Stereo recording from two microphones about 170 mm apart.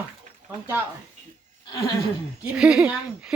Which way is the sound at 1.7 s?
25° left (ahead or behind).